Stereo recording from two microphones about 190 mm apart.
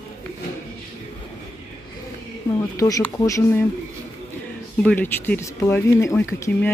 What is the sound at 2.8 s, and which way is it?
Speech, 15° left (ahead or behind).